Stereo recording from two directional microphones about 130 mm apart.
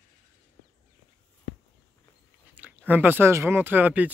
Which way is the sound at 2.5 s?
10° right (ahead or behind).